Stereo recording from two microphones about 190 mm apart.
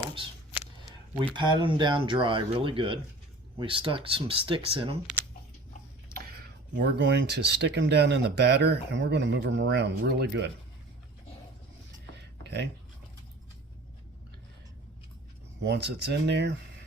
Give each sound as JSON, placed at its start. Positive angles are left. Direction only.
{"t": 1.1, "sound": "speech", "side_deg": -25}
{"t": 5.1, "sound": "a sound", "side_deg": -5}
{"t": 6.8, "sound": "speech", "side_deg": -65}
{"t": 15.6, "sound": "speech", "side_deg": -65}